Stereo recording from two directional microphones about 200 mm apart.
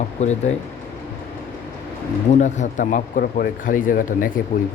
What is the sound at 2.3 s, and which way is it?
Speech, 35° left (ahead or behind).